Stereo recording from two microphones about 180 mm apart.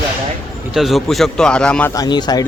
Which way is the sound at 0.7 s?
Centre (ahead or behind).